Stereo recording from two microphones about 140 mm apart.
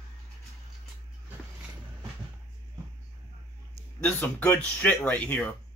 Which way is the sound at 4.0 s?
10° left (ahead or behind).